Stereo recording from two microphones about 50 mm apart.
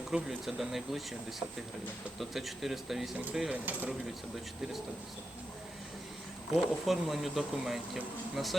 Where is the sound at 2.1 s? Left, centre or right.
Centre.